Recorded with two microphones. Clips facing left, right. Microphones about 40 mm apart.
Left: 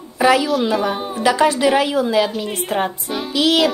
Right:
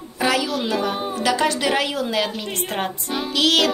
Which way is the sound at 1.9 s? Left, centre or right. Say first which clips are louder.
Left 6 dB; centre.